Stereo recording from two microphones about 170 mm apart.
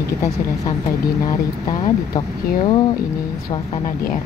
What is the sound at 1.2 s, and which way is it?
Speech, 25° left (ahead or behind).